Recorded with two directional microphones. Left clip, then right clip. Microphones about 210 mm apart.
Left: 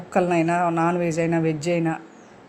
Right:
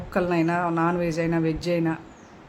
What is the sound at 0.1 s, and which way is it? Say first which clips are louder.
Speech: left 3 dB; 5° left (ahead or behind).